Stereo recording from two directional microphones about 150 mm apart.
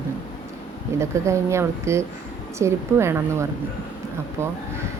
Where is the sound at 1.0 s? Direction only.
20° right (ahead or behind).